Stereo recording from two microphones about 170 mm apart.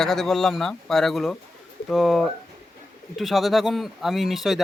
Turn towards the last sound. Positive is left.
turn(degrees=0)  # may be behind; listen again after turning